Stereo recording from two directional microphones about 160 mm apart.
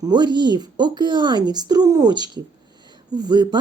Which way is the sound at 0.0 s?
25° right (ahead or behind).